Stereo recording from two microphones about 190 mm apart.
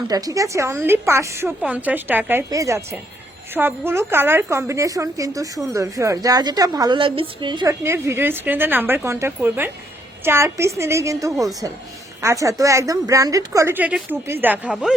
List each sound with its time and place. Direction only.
0.1 s a woman's voice: 20° right (ahead or behind)